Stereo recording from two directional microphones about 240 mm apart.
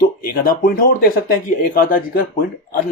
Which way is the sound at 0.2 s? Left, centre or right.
Left.